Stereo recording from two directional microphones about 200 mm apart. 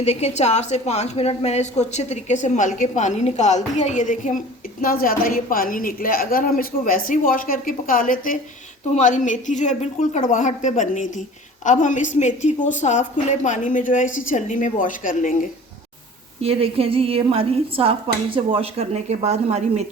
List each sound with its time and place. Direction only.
0.0 s a woman's voice: 30° left (ahead or behind)
16.4 s speech: 30° right (ahead or behind)